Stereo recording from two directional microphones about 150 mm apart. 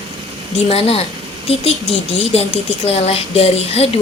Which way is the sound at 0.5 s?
40° left (ahead or behind).